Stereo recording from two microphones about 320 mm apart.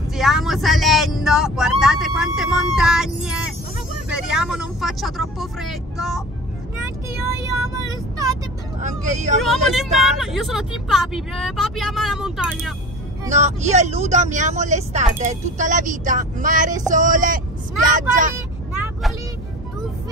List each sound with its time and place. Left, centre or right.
0.1 s vehicle: centre
1.2 s speech: centre
7.7 s speech: centre
8.8 s speech: right
9.4 s speech: centre
13.3 s speech: right